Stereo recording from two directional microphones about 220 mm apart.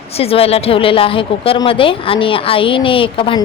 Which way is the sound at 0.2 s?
25° left (ahead or behind).